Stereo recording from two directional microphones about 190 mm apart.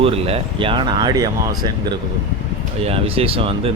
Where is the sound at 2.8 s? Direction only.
30° right (ahead or behind).